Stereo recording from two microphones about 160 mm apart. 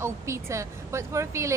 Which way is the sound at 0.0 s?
20° right (ahead or behind).